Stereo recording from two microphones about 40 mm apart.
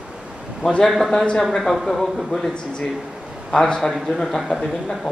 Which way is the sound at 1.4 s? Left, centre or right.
Centre.